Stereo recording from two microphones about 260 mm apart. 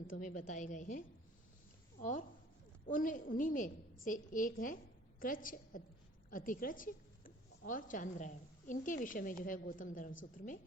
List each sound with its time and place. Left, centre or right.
0.1 s a woman's voice: left